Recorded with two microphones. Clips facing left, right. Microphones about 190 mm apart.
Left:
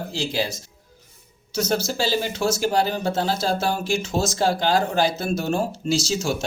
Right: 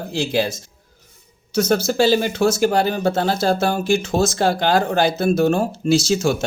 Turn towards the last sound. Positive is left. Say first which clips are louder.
# right 6 dB
turn(degrees=-55)  # may be behind; listen again after turning